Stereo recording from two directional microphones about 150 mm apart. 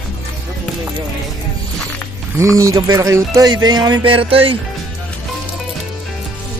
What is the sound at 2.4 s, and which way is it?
Speech, 20° right (ahead or behind).